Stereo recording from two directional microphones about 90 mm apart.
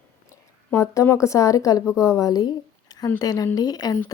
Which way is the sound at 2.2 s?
45° left (ahead or behind).